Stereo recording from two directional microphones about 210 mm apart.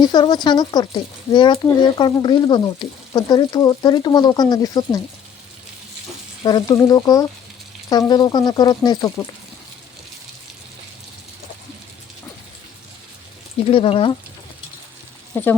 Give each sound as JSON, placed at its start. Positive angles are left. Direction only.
{"t": 0.0, "sound": "speech", "side_deg": 20}
{"t": 6.4, "sound": "speech", "side_deg": 20}
{"t": 13.7, "sound": "speech", "side_deg": 25}
{"t": 15.3, "sound": "speech", "side_deg": 10}